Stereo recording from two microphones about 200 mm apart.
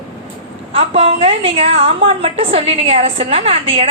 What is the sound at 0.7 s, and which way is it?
A woman's voice, 30° right (ahead or behind).